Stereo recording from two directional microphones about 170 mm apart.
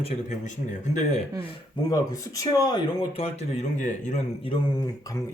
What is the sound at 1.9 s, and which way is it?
Speech, 20° left (ahead or behind).